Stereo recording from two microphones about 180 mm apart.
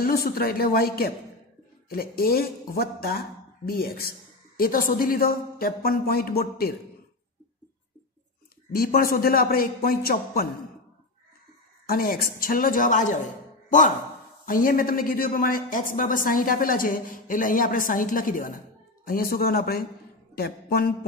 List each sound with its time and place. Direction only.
0.0 s speech: 55° left (ahead or behind)
8.7 s speech: 55° left (ahead or behind)
11.9 s a man's voice: 55° left (ahead or behind)